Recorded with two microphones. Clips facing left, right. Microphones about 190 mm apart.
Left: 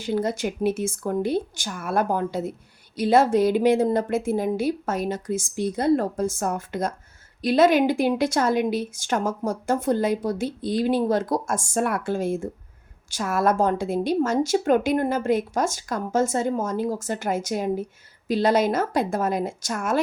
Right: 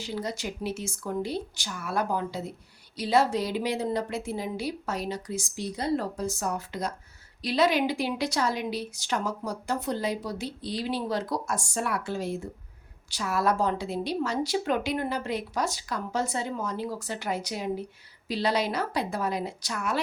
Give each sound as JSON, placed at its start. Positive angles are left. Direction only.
{"t": 0.0, "sound": "speech", "side_deg": 50}